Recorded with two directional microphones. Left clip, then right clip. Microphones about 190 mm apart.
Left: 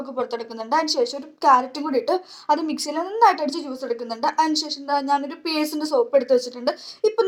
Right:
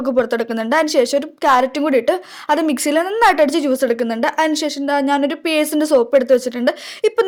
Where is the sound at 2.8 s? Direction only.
35° right (ahead or behind).